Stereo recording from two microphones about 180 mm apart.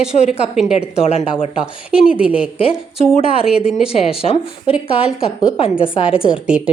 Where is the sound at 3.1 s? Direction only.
35° left (ahead or behind).